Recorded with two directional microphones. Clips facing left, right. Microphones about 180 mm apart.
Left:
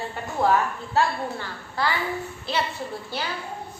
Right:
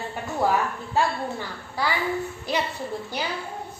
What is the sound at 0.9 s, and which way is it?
A woman's voice, 10° right (ahead or behind).